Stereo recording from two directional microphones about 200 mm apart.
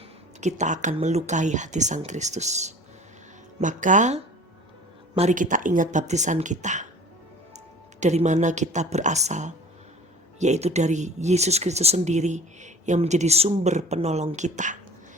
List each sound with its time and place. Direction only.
0.3 s speech: 35° right (ahead or behind)
8.0 s speech: 35° right (ahead or behind)